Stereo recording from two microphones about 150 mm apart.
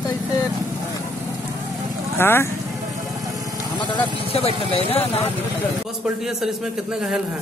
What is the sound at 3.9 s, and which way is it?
Speech, 40° left (ahead or behind).